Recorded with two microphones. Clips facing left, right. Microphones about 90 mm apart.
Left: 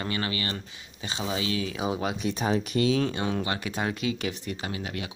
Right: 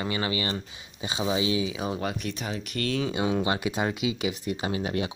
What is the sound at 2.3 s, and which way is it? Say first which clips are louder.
Speech: left 7 dB; 35° left (ahead or behind).